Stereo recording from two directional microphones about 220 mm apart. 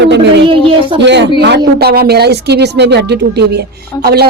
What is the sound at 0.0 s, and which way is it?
A woman's voice, 50° right (ahead or behind).